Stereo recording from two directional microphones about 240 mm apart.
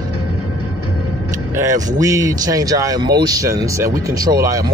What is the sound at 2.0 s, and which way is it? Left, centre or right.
Speech, centre.